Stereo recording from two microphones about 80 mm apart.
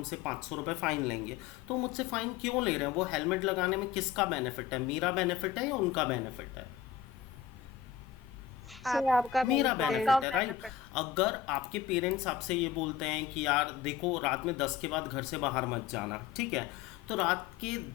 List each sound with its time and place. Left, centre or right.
0.1 s a woman's voice: centre
8.7 s a woman's voice: centre